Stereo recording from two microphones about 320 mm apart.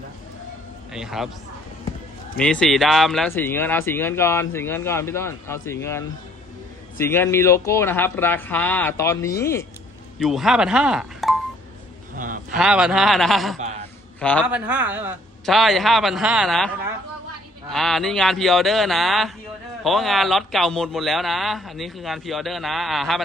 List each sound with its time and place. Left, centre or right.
0.9 s a man's voice: centre
2.4 s speech: centre
7.0 s speech: centre
12.1 s a sound: right
12.5 s a man's voice: centre